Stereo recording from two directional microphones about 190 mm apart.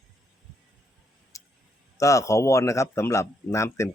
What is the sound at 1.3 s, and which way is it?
Tick, 15° left (ahead or behind).